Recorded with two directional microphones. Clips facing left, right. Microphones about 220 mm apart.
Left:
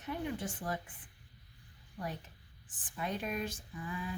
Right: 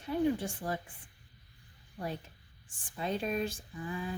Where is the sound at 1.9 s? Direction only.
30° right (ahead or behind).